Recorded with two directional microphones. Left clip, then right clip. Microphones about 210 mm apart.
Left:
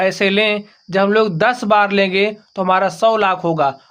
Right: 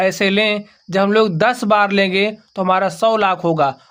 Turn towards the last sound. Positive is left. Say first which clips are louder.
# even
turn(degrees=-20)  # may be behind; listen again after turning